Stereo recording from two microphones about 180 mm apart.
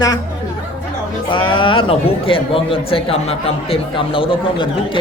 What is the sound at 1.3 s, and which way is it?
Speech, 25° left (ahead or behind).